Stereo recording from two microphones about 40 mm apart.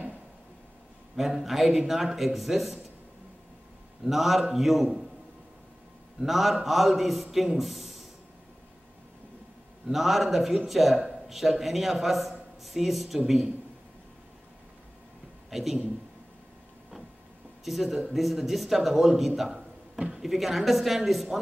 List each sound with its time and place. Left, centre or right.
1.1 s a man's voice: centre
4.0 s a man's voice: centre
6.2 s a man's voice: centre
9.8 s a man's voice: centre
15.5 s speech: centre
17.6 s a man's voice: centre
19.5 s a sound: right
20.2 s a man's voice: centre